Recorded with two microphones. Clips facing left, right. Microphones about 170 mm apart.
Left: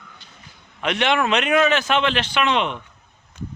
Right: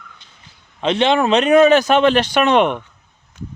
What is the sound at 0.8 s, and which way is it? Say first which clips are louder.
Speech: right 5 dB; 30° right (ahead or behind).